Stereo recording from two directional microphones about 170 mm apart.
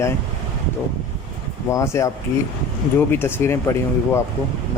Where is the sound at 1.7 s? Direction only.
15° left (ahead or behind).